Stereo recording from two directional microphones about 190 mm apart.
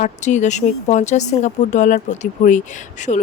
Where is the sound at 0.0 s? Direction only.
40° left (ahead or behind).